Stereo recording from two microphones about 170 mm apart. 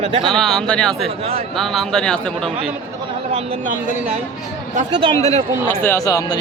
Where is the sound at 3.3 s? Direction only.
50° right (ahead or behind).